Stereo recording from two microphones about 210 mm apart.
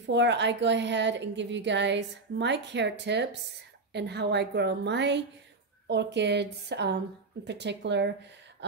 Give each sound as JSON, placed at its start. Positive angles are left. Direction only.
{"t": 0.0, "sound": "a woman's voice", "side_deg": -55}